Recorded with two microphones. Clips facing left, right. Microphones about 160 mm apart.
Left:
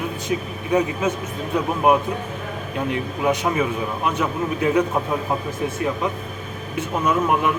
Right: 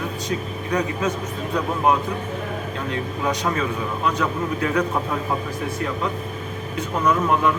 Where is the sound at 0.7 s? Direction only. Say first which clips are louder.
Left 3 dB; 25° left (ahead or behind).